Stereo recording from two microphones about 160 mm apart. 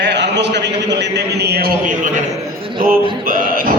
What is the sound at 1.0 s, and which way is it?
Speech, 90° right.